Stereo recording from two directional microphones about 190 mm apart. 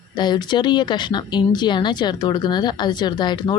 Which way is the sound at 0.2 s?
25° left (ahead or behind).